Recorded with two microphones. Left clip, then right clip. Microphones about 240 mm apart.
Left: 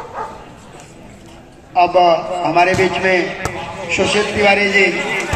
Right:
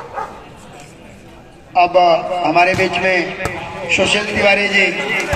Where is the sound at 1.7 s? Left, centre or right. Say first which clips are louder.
Even; right.